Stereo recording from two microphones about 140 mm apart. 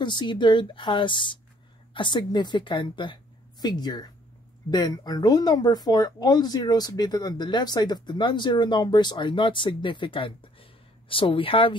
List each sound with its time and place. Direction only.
0.0 s a woman's voice: 35° left (ahead or behind)